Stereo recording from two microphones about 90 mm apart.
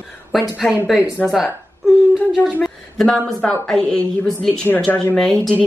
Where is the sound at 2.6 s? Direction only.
5° left (ahead or behind).